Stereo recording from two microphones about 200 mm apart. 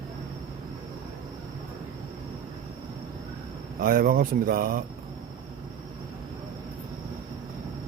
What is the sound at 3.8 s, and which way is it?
Speech, 45° right (ahead or behind).